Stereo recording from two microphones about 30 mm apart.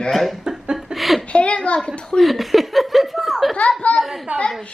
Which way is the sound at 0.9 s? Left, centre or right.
Centre.